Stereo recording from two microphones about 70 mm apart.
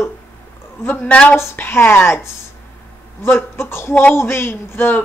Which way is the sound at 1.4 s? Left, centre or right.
Left.